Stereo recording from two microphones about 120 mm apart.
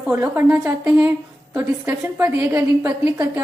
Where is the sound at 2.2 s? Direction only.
20° right (ahead or behind).